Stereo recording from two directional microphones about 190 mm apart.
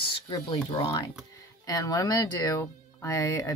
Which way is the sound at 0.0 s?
20° left (ahead or behind).